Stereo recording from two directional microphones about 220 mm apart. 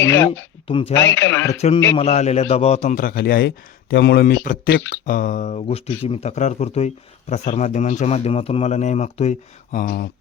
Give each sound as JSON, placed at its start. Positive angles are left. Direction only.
{"t": 0.0, "sound": "speech", "side_deg": 10}
{"t": 0.7, "sound": "speech", "side_deg": 25}
{"t": 1.1, "sound": "speech", "side_deg": 10}
{"t": 1.5, "sound": "a man's voice", "side_deg": 30}